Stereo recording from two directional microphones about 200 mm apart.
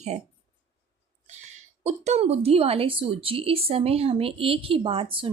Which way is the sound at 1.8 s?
35° right (ahead or behind).